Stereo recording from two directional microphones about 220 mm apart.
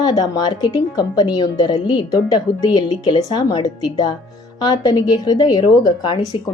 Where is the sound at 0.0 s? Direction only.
15° left (ahead or behind).